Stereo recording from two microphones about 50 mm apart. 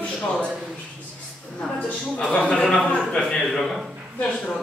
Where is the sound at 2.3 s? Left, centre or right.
Centre.